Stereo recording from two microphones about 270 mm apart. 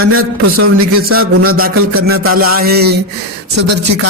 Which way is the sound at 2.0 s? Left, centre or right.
Right.